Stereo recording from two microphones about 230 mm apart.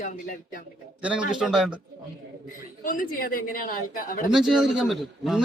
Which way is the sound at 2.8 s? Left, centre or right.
Left.